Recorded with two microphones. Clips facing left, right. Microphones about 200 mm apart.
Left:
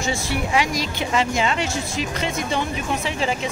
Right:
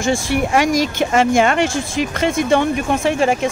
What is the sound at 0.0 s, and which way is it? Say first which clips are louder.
Speech: right 7 dB; 50° right (ahead or behind).